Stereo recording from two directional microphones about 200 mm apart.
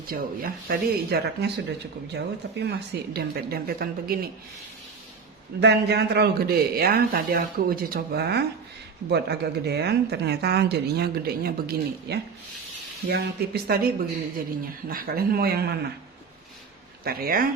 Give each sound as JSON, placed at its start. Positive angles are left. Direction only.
{"t": 0.1, "sound": "speech", "side_deg": -45}
{"t": 5.5, "sound": "a woman's voice", "side_deg": -55}
{"t": 17.0, "sound": "speech", "side_deg": -50}